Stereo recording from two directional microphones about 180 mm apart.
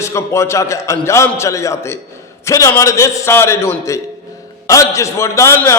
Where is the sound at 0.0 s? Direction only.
15° left (ahead or behind).